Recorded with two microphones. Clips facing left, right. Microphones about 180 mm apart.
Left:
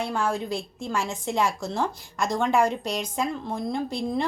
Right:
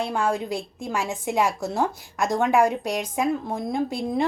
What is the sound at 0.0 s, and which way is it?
A woman's voice, 15° right (ahead or behind).